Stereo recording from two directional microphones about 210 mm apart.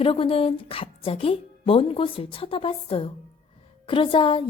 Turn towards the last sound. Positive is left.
turn(degrees=25)  # may be behind; listen again after turning